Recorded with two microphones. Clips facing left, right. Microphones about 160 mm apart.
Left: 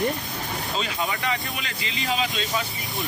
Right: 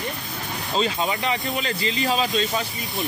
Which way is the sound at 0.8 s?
20° right (ahead or behind).